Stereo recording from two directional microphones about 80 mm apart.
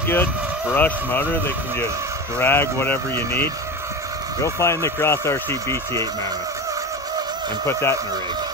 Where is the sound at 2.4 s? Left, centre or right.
Left.